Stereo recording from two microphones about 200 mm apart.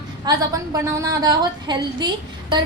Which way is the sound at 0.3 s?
20° right (ahead or behind).